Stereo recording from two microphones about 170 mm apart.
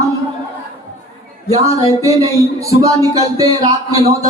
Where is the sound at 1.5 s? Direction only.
20° right (ahead or behind).